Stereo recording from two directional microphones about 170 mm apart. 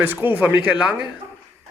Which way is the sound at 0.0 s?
10° right (ahead or behind).